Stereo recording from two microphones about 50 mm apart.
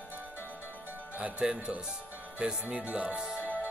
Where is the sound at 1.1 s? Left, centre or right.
Right.